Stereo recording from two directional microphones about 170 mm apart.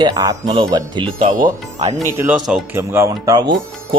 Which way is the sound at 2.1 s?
15° right (ahead or behind).